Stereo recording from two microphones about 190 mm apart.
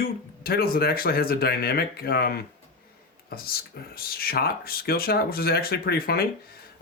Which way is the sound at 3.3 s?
50° left (ahead or behind).